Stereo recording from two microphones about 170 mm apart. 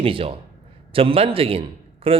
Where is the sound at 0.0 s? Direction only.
35° right (ahead or behind).